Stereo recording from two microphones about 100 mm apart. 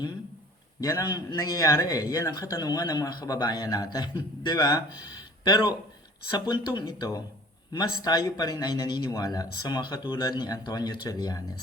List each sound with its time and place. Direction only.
0.8 s a man's voice: 35° left (ahead or behind)